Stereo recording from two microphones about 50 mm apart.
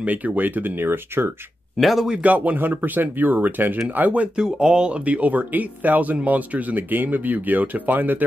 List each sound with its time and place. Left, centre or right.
0.0 s speech: right
1.8 s speech: centre
2.2 s speech: right
4.4 s speech: centre; by 8.3 s right